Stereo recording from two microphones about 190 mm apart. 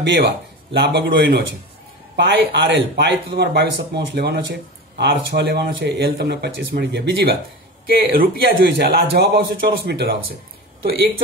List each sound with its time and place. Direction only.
0.0 s speech: 60° right (ahead or behind)
7.8 s speech: 50° right (ahead or behind)